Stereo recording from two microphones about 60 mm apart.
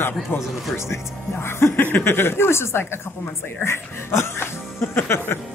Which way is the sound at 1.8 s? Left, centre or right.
Left.